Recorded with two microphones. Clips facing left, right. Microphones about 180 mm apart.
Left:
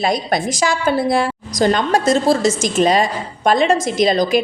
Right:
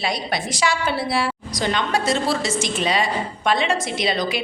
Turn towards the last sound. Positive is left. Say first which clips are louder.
# left 8 dB
turn(degrees=45)  # may be behind; listen again after turning